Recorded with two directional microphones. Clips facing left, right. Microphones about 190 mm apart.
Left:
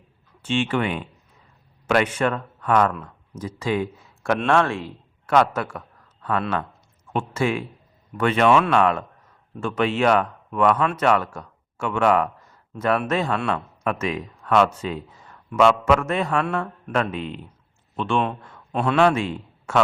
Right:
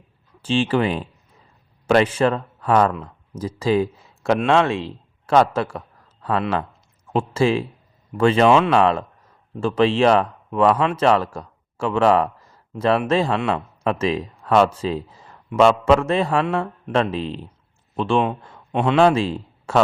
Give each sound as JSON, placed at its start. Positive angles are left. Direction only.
{"t": 0.4, "sound": "speech", "side_deg": -35}
{"t": 4.4, "sound": "speech", "side_deg": -20}
{"t": 7.1, "sound": "speech", "side_deg": -30}
{"t": 18.4, "sound": "a sound", "side_deg": -25}
{"t": 18.9, "sound": "a man's voice", "side_deg": -30}